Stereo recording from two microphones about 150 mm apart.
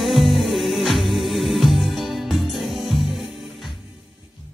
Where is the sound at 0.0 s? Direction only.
Centre (ahead or behind).